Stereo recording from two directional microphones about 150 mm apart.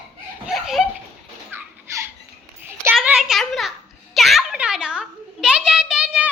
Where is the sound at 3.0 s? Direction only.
5° right (ahead or behind).